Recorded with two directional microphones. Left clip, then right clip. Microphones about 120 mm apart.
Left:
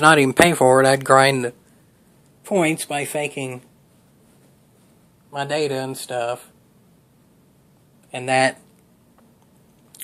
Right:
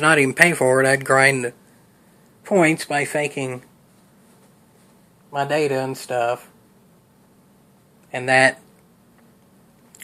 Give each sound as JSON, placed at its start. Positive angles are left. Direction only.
{"t": 0.0, "sound": "speech", "side_deg": 35}
{"t": 2.4, "sound": "speech", "side_deg": 15}
{"t": 5.3, "sound": "speech", "side_deg": 15}
{"t": 8.1, "sound": "speech", "side_deg": 15}